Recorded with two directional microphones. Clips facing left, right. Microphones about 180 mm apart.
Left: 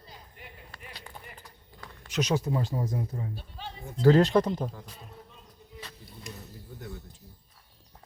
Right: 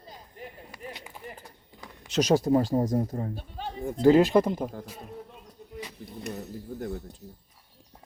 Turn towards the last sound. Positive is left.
turn(degrees=-40)  # may be behind; listen again after turning